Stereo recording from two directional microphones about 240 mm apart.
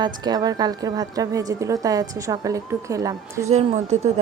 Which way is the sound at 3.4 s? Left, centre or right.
Right.